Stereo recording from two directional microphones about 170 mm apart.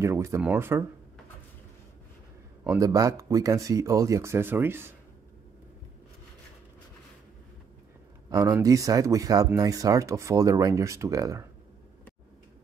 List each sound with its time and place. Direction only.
0.0 s speech: 15° right (ahead or behind)
2.6 s speech: 15° right (ahead or behind)
8.3 s speech: 20° right (ahead or behind)